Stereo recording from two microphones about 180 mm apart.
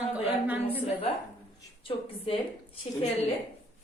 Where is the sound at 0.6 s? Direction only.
35° left (ahead or behind).